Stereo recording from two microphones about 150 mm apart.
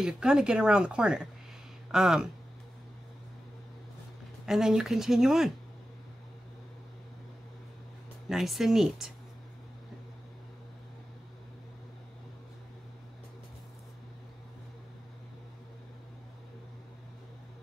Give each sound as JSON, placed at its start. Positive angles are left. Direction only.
{"t": 0.0, "sound": "speech", "side_deg": -5}
{"t": 4.5, "sound": "speech", "side_deg": -5}
{"t": 8.3, "sound": "speech", "side_deg": 0}